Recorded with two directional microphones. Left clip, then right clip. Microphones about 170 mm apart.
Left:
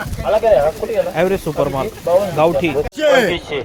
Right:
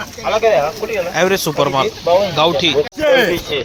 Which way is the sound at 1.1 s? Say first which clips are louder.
Right 2 dB; 5° left (ahead or behind).